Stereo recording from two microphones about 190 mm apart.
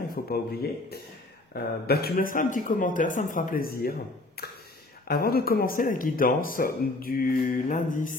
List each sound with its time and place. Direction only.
0.1 s speech: 55° left (ahead or behind)
4.4 s a sound: 55° left (ahead or behind)
5.0 s speech: 55° left (ahead or behind)